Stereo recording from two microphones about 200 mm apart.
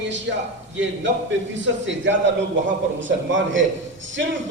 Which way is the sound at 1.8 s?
65° right (ahead or behind).